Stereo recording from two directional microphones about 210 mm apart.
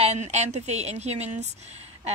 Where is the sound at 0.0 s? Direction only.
30° right (ahead or behind).